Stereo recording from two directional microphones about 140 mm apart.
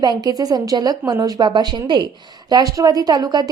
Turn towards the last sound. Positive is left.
turn(degrees=-30)  # may be behind; listen again after turning